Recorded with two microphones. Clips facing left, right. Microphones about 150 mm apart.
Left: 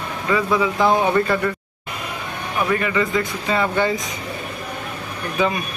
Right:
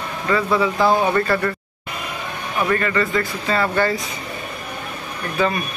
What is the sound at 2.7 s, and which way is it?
A man's voice, 15° left (ahead or behind).